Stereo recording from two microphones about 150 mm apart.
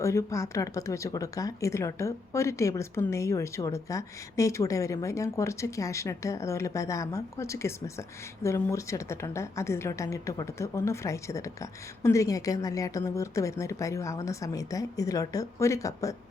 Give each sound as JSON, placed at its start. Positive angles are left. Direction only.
{"t": 0.0, "sound": "speech", "side_deg": 20}